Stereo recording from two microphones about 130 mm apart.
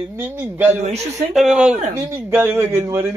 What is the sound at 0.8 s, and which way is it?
Speech, 55° right (ahead or behind).